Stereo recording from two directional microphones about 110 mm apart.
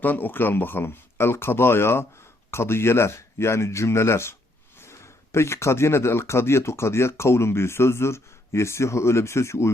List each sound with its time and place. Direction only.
0.0 s speech: 15° left (ahead or behind)